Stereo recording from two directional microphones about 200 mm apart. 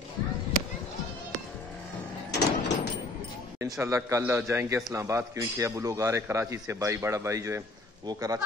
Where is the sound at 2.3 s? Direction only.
55° left (ahead or behind).